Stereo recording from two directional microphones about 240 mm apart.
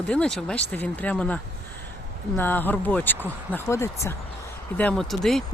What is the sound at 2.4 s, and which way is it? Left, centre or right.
Speech, centre.